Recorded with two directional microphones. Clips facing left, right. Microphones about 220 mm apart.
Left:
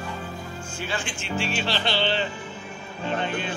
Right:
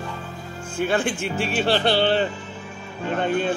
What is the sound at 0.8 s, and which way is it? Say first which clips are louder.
Speech: right 11 dB; 60° right (ahead or behind).